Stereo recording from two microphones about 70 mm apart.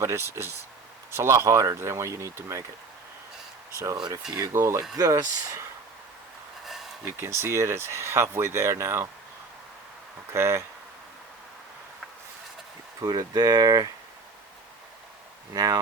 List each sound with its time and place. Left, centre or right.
0.0 s speech: right
4.1 s speech: right
7.0 s speech: right
10.3 s speech: right
13.0 s speech: right
15.5 s speech: right